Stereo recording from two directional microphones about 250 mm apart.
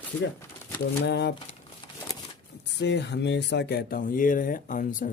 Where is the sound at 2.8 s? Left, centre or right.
Left.